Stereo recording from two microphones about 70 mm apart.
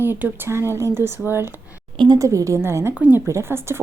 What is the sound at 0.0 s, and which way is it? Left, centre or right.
Speech, right.